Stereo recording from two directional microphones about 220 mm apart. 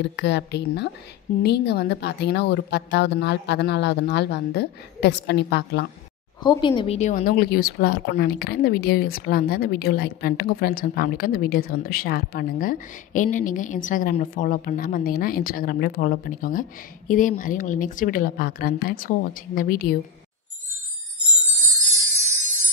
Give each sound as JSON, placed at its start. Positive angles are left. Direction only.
{"t": 0.1, "sound": "a woman's voice", "side_deg": 50}
{"t": 6.4, "sound": "a woman's voice", "side_deg": 20}